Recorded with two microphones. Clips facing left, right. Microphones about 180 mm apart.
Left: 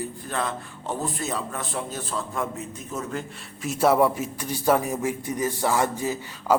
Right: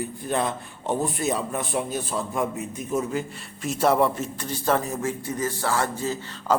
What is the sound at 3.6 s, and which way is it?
A man's voice, 5° left (ahead or behind).